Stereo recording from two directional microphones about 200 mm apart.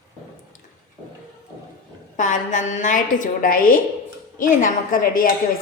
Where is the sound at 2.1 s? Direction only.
40° left (ahead or behind).